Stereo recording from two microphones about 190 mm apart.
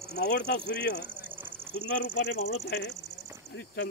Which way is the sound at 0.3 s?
65° left (ahead or behind).